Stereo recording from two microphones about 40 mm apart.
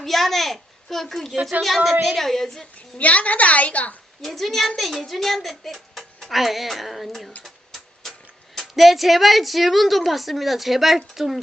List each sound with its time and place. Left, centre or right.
0.0 s a child's voice: centre
3.0 s a woman's voice: left
4.2 s a woman's voice: centre
7.4 s a sound: centre
8.5 s a woman's voice: centre